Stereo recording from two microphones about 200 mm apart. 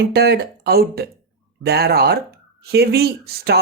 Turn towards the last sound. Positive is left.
turn(degrees=-50)  # may be behind; listen again after turning